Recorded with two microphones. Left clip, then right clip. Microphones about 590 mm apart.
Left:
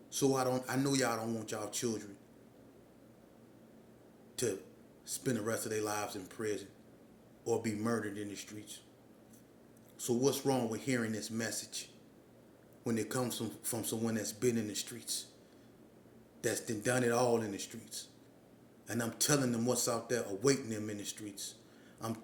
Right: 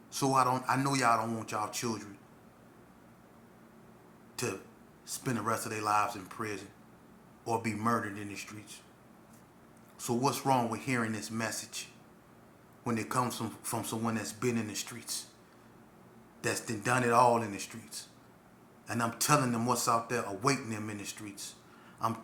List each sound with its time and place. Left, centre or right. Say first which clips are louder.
0.1 s a man's voice: right 4 dB; left
5.0 s a man's voice: right 3 dB; left
10.0 s a man's voice: right 1 dB; left
12.8 s a man's voice: right 4 dB; left
16.4 s a man's voice: right 2 dB; left